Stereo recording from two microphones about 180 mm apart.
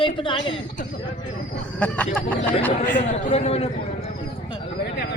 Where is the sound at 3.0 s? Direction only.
35° left (ahead or behind).